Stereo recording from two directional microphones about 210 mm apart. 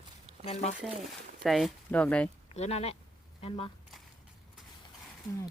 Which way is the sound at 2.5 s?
30° left (ahead or behind).